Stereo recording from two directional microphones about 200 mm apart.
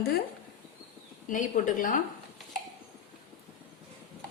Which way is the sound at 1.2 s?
40° left (ahead or behind).